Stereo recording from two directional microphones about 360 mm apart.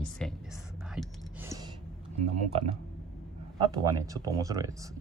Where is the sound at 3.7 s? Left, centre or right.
Centre.